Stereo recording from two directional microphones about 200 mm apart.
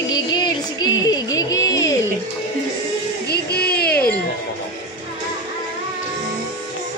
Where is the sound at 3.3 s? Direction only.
50° left (ahead or behind).